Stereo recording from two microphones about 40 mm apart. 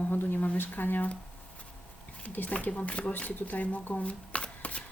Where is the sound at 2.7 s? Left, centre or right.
Left.